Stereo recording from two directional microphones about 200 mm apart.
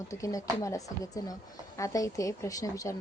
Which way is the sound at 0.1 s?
15° left (ahead or behind).